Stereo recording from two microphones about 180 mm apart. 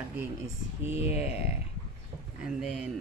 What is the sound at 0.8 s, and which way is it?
Speech, 35° left (ahead or behind).